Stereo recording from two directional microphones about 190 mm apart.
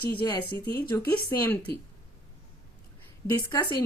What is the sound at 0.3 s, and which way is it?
Speech, 15° left (ahead or behind).